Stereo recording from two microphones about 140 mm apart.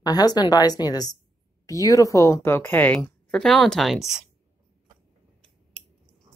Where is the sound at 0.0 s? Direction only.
30° left (ahead or behind); by 4.3 s 5° right (ahead or behind).